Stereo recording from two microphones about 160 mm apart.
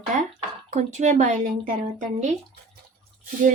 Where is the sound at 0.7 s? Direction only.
50° right (ahead or behind).